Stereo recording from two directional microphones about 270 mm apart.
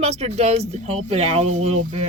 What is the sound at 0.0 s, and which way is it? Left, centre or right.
Speech, right.